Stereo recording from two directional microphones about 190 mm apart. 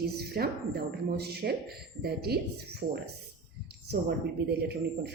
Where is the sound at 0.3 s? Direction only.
55° right (ahead or behind).